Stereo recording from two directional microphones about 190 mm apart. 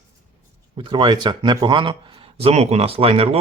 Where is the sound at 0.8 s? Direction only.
25° right (ahead or behind).